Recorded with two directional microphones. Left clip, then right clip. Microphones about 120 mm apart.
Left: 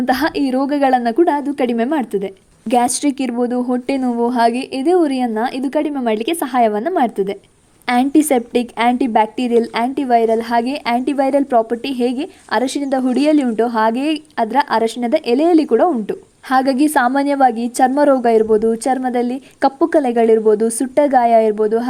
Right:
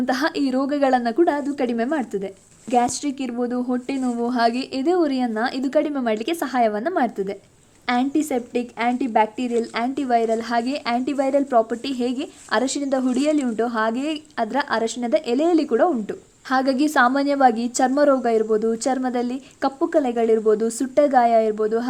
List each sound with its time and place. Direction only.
0.0 s a woman's voice: 40° left (ahead or behind); by 3.3 s 55° left (ahead or behind)
3.3 s a woman's voice: 40° left (ahead or behind)
7.9 s a woman's voice: 55° left (ahead or behind); by 19.4 s 35° left (ahead or behind)
19.6 s a woman's voice: 60° left (ahead or behind); by 21.8 s 35° left (ahead or behind)